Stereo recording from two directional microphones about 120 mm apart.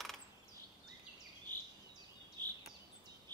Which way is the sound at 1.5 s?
15° left (ahead or behind).